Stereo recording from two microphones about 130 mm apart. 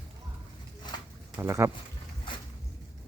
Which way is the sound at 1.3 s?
20° right (ahead or behind).